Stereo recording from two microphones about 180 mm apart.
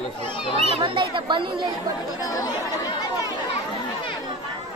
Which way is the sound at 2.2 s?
20° left (ahead or behind).